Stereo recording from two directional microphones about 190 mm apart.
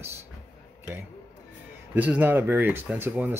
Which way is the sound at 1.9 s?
10° right (ahead or behind).